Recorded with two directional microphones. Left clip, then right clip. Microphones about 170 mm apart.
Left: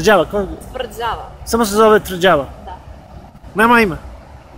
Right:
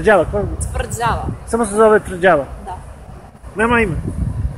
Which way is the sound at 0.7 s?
65° right (ahead or behind).